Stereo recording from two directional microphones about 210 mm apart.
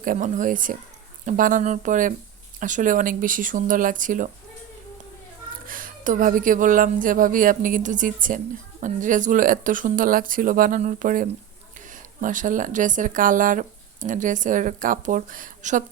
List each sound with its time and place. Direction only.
0.0 s speech: 40° right (ahead or behind)
5.6 s speech: 40° right (ahead or behind)